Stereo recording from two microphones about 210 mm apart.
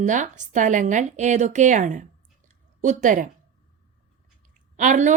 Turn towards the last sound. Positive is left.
turn(degrees=-35)  # may be behind; listen again after turning